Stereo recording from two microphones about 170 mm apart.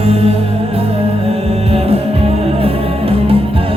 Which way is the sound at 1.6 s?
35° right (ahead or behind).